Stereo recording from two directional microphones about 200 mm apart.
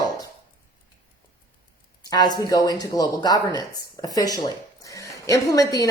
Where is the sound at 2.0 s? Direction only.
20° left (ahead or behind).